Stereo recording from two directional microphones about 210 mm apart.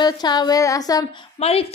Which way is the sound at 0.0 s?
20° left (ahead or behind).